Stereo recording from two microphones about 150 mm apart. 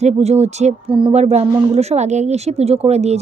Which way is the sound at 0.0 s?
45° right (ahead or behind).